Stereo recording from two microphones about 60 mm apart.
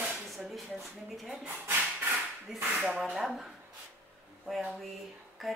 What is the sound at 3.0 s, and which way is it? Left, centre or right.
Speech, centre.